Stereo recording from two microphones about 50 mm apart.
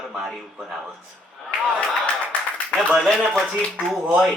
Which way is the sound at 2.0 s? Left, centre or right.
Left.